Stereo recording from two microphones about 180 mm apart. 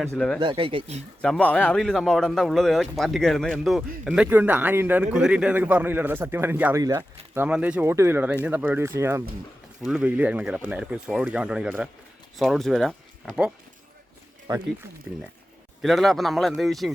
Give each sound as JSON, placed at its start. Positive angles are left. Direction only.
{"t": 0.0, "sound": "speech", "side_deg": 5}
{"t": 0.3, "sound": "speech", "side_deg": -30}
{"t": 1.2, "sound": "a man's voice", "side_deg": 5}
{"t": 9.8, "sound": "speech", "side_deg": -5}
{"t": 14.5, "sound": "speech", "side_deg": -20}
{"t": 15.8, "sound": "speech", "side_deg": 0}